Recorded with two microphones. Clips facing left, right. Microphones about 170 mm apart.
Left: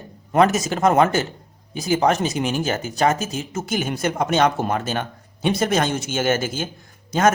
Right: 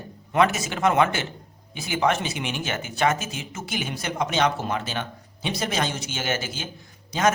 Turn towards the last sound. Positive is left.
turn(degrees=50)  # may be behind; listen again after turning